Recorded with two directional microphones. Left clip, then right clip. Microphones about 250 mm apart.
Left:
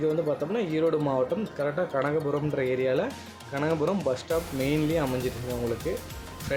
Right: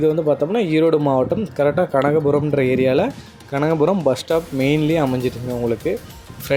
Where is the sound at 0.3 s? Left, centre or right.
Right.